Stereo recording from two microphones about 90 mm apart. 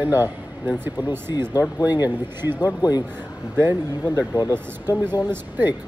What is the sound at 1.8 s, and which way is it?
Speech, 20° right (ahead or behind).